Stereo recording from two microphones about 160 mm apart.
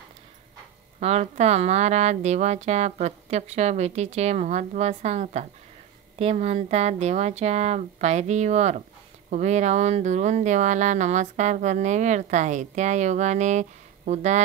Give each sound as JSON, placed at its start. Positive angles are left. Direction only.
{"t": 0.9, "sound": "speech", "side_deg": -45}